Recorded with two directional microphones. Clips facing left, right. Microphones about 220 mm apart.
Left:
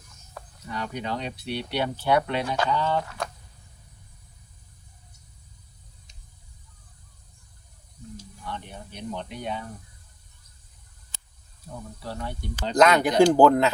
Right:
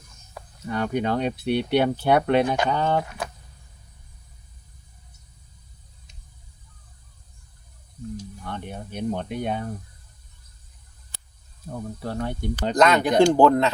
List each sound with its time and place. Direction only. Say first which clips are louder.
0.7 s speech: right 7 dB; 50° right (ahead or behind)
8.4 s speech: right 2 dB; 50° right (ahead or behind)
12.0 s speech: right 6 dB; 50° right (ahead or behind)
12.7 s speech: even; centre (ahead or behind)